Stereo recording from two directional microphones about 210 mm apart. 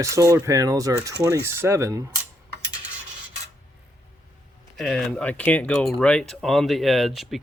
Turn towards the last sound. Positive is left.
turn(degrees=0)  # may be behind; listen again after turning